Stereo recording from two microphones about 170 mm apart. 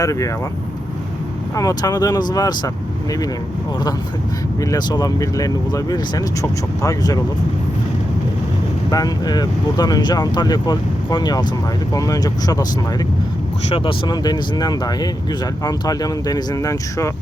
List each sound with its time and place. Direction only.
0.0 s speech: 20° left (ahead or behind)
1.5 s speech: 20° left (ahead or behind)
4.7 s speech: 20° left (ahead or behind)
8.9 s speech: 20° left (ahead or behind)
13.7 s speech: 30° left (ahead or behind)